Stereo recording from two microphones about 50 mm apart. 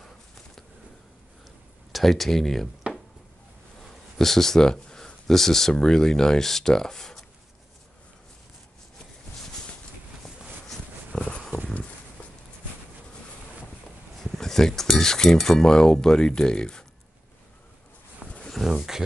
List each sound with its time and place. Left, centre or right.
1.9 s speech: centre
4.2 s speech: centre
11.1 s dog: left
12.2 s a sound: left
14.3 s speech: centre
18.5 s a sound: centre
18.8 s speech: centre